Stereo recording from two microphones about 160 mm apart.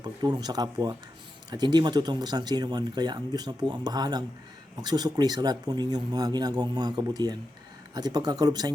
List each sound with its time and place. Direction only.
0.0 s speech: 25° right (ahead or behind)